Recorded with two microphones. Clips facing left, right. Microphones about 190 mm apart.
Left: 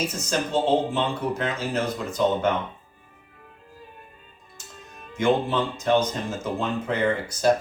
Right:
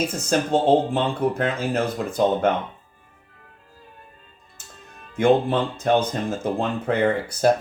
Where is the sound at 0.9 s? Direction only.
55° right (ahead or behind).